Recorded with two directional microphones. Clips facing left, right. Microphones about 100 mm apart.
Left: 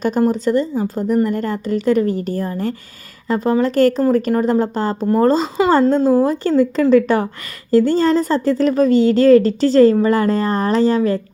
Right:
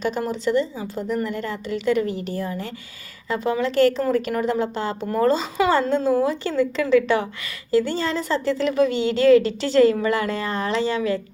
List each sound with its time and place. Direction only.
0.0 s speech: 45° left (ahead or behind)